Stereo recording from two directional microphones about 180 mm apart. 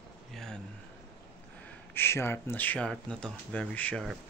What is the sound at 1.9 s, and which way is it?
Speech, 15° left (ahead or behind).